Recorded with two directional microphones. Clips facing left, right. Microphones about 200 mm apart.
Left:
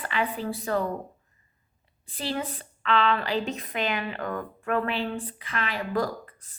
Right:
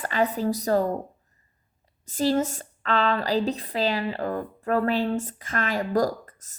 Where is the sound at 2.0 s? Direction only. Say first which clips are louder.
Right 8 dB; 45° right (ahead or behind).